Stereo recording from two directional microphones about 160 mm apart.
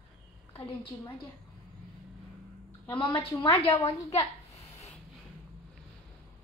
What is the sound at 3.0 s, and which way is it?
A woman's voice, 25° left (ahead or behind).